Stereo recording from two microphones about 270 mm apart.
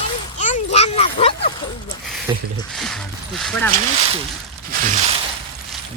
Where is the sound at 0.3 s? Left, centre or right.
Left.